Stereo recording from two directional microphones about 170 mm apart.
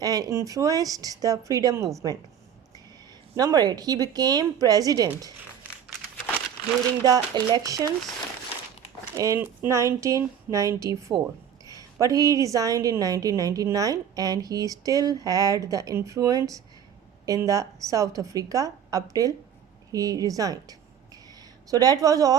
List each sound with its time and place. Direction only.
0.0 s a woman's voice: 20° right (ahead or behind)
3.3 s a woman's voice: 20° right (ahead or behind)
7.0 s a woman's voice: 20° right (ahead or behind)
9.1 s a woman's voice: 20° right (ahead or behind)